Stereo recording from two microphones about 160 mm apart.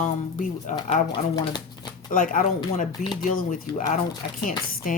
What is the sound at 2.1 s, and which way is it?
Speech, 55° left (ahead or behind).